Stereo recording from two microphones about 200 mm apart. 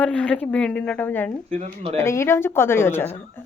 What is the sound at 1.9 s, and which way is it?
A woman's voice, 15° left (ahead or behind).